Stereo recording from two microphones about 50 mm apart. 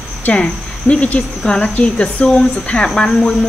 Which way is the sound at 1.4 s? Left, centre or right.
Centre.